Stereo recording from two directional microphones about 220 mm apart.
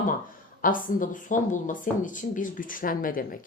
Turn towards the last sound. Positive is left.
turn(degrees=40)  # may be behind; listen again after turning